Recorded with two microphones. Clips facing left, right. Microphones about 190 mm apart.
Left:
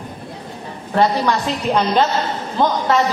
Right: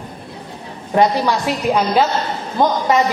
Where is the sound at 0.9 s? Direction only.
15° right (ahead or behind).